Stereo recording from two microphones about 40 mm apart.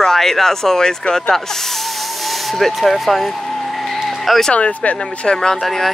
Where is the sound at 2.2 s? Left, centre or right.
Centre.